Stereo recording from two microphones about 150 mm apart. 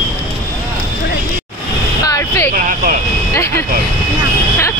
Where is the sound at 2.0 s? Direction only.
20° left (ahead or behind).